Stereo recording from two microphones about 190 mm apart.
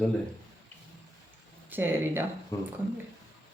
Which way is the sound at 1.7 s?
10° right (ahead or behind).